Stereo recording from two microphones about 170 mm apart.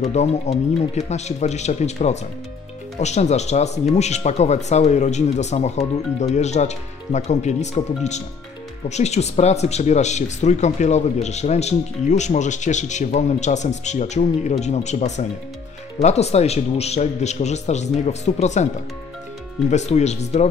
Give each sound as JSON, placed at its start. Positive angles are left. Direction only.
{"t": 0.0, "sound": "speech", "side_deg": 40}
{"t": 19.7, "sound": "speech", "side_deg": 40}